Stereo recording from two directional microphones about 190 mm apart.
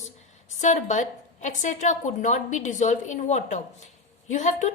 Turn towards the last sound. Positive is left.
turn(degrees=40)  # may be behind; listen again after turning